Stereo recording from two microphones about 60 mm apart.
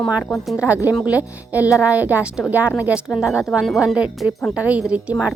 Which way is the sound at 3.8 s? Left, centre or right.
Centre.